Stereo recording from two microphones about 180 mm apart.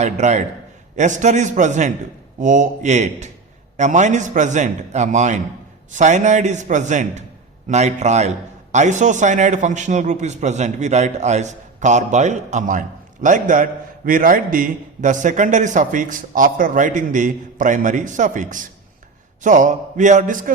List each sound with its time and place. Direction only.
0.0 s a man's voice: 40° right (ahead or behind)